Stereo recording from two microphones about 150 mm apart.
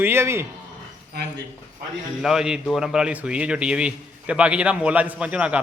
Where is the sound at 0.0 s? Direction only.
15° right (ahead or behind).